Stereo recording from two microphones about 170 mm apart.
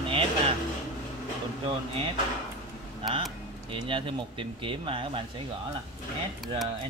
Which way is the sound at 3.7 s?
30° right (ahead or behind).